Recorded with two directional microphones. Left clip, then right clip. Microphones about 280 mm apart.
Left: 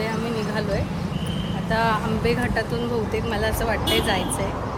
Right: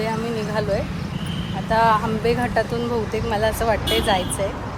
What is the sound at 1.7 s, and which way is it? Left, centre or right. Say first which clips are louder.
Speech: right 5 dB; centre.